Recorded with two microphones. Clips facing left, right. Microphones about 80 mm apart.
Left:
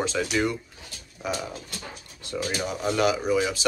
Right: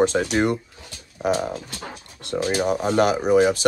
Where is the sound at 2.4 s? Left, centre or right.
Right.